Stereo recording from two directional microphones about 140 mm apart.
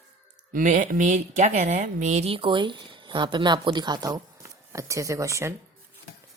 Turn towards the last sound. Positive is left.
turn(degrees=-20)  # may be behind; listen again after turning